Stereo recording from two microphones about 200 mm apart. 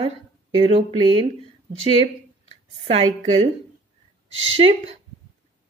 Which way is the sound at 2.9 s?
30° right (ahead or behind).